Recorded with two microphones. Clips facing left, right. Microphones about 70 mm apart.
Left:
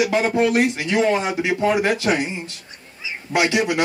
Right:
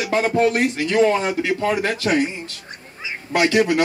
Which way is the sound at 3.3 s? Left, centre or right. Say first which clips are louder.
Right 2 dB; right.